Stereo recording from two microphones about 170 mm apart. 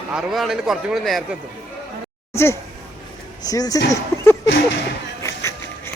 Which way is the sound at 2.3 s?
15° left (ahead or behind).